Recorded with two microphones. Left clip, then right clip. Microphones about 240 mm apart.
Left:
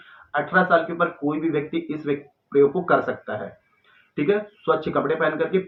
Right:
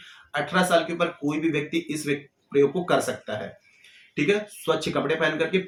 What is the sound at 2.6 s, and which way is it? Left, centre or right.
Speech, right.